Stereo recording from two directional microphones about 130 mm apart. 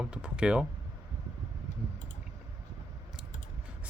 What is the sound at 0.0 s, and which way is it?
Speech, 10° right (ahead or behind).